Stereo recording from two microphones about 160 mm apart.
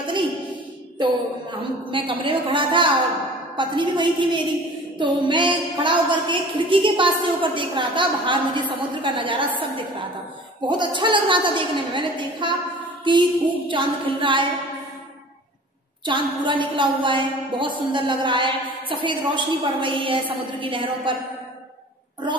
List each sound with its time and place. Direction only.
0.0 s a sound: 30° right (ahead or behind)
1.9 s a woman's voice: 30° right (ahead or behind)
10.7 s a woman's voice: 30° right (ahead or behind)
16.1 s a woman's voice: 30° right (ahead or behind)